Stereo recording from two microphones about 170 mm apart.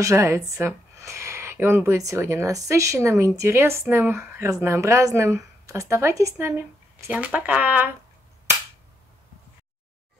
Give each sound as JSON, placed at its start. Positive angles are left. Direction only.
{"t": 0.0, "sound": "speech", "side_deg": -20}